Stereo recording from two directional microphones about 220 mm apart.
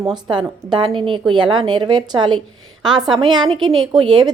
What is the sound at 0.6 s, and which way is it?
Speech, 20° right (ahead or behind).